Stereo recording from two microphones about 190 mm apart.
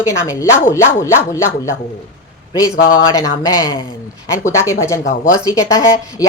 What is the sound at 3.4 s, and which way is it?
Speech, 20° left (ahead or behind).